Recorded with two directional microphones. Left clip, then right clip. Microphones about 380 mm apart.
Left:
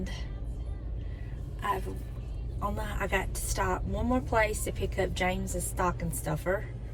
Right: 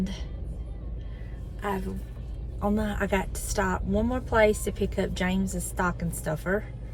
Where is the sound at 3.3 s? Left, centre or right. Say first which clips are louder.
Right 3 dB; centre.